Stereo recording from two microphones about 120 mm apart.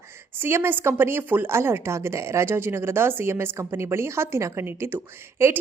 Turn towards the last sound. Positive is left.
turn(degrees=-20)  # may be behind; listen again after turning